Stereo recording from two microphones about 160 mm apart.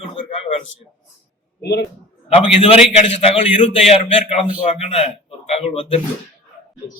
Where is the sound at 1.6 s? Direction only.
90° left.